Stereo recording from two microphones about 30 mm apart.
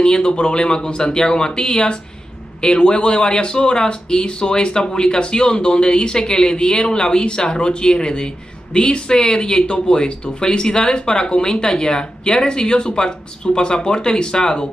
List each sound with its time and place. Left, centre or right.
0.0 s speech: left